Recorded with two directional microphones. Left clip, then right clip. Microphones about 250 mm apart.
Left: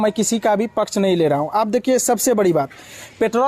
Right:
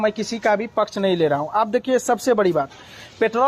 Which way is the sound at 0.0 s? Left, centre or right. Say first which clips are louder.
Left 2 dB; left.